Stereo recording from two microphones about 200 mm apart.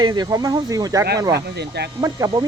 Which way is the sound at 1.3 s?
55° right (ahead or behind).